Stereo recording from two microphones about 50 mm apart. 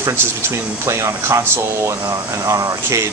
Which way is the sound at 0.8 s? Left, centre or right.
Right.